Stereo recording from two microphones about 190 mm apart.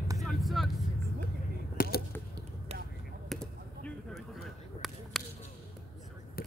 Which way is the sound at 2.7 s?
35° right (ahead or behind).